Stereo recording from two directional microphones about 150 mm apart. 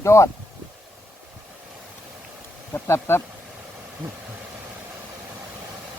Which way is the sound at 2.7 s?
15° left (ahead or behind).